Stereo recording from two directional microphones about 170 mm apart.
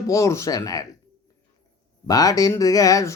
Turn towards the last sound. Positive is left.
turn(degrees=20)  # may be behind; listen again after turning